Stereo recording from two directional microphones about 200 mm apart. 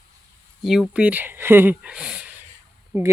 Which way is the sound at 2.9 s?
15° right (ahead or behind).